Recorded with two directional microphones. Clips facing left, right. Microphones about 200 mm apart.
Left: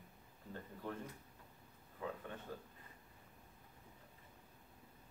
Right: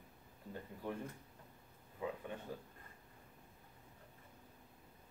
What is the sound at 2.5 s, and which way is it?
Speech, 10° right (ahead or behind).